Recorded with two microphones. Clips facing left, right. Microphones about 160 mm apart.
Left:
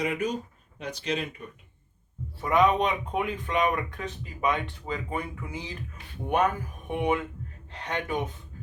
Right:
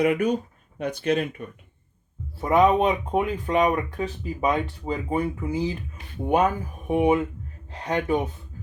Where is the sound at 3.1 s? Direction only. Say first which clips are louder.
Right 5 dB; 35° right (ahead or behind).